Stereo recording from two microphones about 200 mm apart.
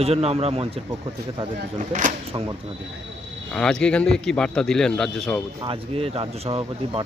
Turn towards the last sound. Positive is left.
turn(degrees=-30)  # may be behind; listen again after turning